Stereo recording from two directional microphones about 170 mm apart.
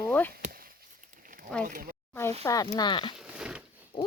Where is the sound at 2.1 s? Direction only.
15° left (ahead or behind).